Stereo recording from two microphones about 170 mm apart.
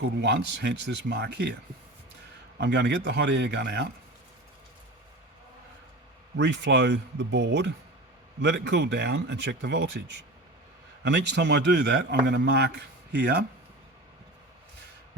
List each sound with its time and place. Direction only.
0.2 s a man's voice: 80° right
2.6 s speech: 85° right
6.3 s a man's voice: 90° right